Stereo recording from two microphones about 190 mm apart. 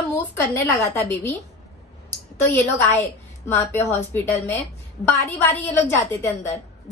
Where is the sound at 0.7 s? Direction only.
15° left (ahead or behind).